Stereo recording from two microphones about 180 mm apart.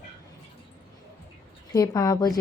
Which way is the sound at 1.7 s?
20° left (ahead or behind).